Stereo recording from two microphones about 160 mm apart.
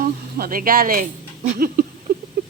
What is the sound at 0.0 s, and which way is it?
Speech, 65° right (ahead or behind).